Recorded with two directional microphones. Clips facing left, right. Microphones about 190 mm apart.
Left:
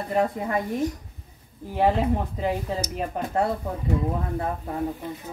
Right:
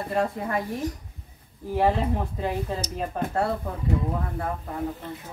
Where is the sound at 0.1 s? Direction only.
20° left (ahead or behind).